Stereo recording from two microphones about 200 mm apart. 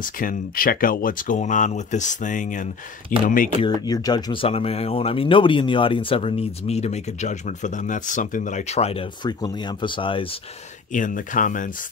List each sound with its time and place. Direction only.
0.0 s speech: 45° left (ahead or behind)
3.8 s speech: 20° left (ahead or behind)
10.9 s speech: 40° left (ahead or behind)